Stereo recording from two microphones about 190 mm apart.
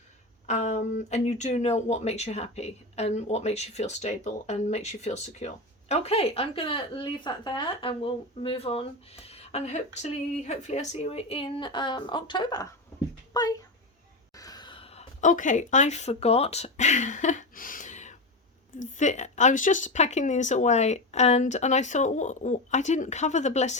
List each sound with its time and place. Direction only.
0.4 s a child's voice: 35° left (ahead or behind)